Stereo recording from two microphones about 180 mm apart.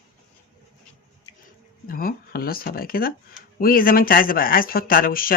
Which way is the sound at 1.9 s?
55° left (ahead or behind).